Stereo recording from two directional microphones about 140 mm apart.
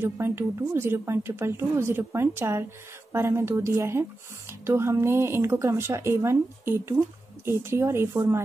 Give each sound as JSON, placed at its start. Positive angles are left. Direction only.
{"t": 0.0, "sound": "speech", "side_deg": -15}